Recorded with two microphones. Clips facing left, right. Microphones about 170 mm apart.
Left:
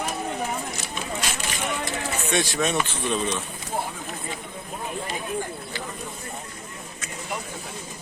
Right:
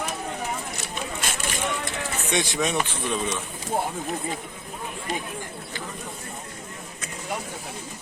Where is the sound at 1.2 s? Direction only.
50° right (ahead or behind).